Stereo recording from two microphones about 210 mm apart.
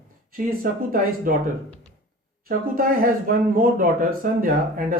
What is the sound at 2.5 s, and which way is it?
Speech, 40° right (ahead or behind).